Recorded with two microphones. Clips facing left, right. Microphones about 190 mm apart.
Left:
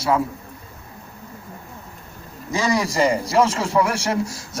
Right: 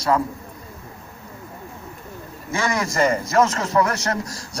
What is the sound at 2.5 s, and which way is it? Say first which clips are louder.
A man's voice: left 3 dB; 15° left (ahead or behind).